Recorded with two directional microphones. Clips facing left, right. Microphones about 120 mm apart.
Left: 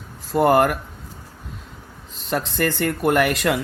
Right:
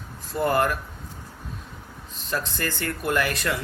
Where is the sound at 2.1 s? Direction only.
75° left (ahead or behind).